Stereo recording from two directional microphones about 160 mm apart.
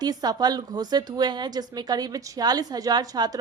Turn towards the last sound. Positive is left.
turn(degrees=-25)  # may be behind; listen again after turning